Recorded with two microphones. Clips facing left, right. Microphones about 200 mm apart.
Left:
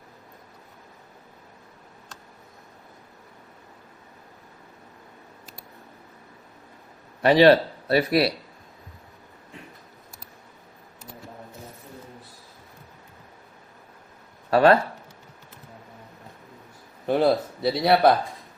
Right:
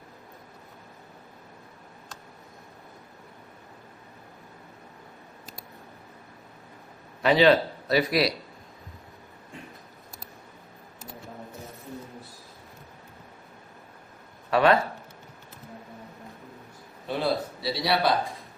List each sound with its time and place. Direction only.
7.3 s speech: 35° left (ahead or behind)
14.5 s speech: 40° left (ahead or behind)
17.1 s a sound: 50° left (ahead or behind)